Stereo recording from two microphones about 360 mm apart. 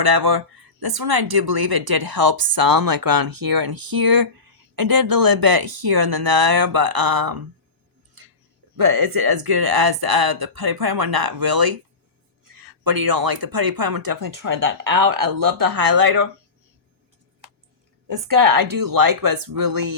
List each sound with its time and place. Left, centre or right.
0.0 s speech: right
8.2 s a sound: right
8.7 s speech: right
18.1 s speech: right